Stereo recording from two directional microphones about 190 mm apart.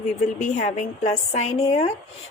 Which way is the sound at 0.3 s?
40° left (ahead or behind).